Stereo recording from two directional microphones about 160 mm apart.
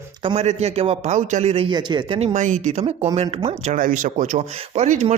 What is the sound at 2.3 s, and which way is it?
Speech, 50° right (ahead or behind).